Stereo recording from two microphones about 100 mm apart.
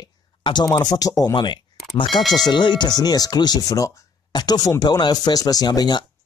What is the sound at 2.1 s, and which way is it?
Speech, centre (ahead or behind).